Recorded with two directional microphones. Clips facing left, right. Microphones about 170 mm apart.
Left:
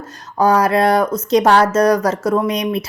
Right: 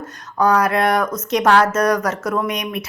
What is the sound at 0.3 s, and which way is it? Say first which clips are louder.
Speech: left 3 dB; 30° left (ahead or behind).